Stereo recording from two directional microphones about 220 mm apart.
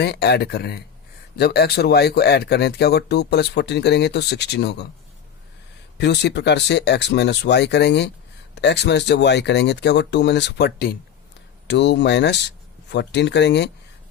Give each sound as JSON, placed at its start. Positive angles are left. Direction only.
{"t": 0.0, "sound": "speech", "side_deg": 50}
{"t": 6.0, "sound": "speech", "side_deg": 50}